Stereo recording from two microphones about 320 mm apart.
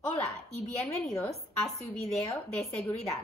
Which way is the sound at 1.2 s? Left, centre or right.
Centre.